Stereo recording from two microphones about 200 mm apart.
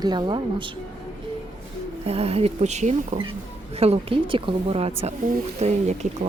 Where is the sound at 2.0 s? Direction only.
30° right (ahead or behind).